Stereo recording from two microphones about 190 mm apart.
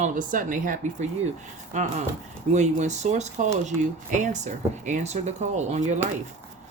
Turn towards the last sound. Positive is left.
turn(degrees=-40)  # may be behind; listen again after turning